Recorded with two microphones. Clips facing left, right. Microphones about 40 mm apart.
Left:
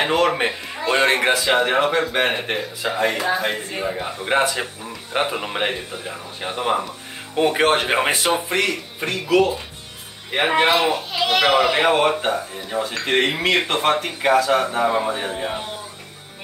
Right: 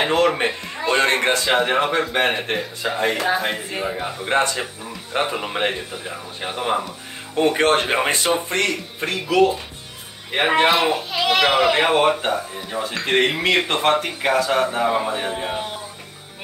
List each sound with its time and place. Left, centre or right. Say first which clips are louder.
0.0 s speech: even; centre